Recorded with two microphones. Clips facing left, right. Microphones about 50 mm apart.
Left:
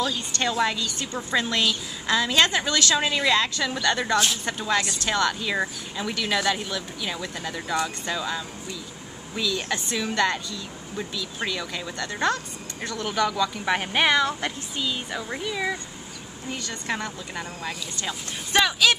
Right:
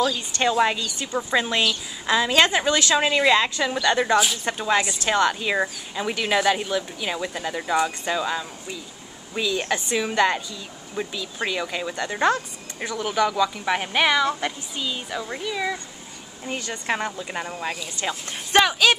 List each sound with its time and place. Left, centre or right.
0.5 s a woman's voice: centre
13.7 s speech: centre
16.5 s a woman's voice: right